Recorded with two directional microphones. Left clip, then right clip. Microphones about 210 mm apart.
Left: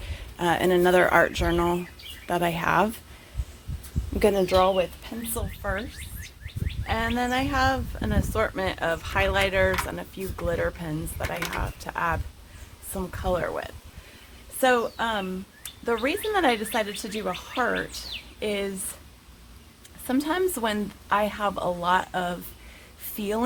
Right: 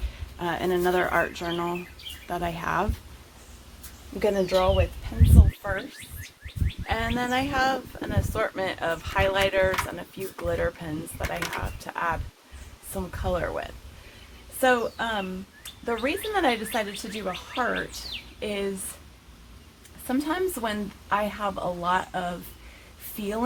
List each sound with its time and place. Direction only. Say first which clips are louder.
0.3 s speech: left 4 dB; 35° left (ahead or behind)
4.2 s speech: left 2 dB; 45° left (ahead or behind)
5.6 s speech: left 3 dB; 30° left (ahead or behind)
6.8 s speech: left 1 dB; 30° left (ahead or behind)
20.1 s speech: left 2 dB; 35° left (ahead or behind)